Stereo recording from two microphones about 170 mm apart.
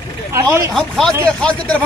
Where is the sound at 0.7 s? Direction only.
Centre (ahead or behind).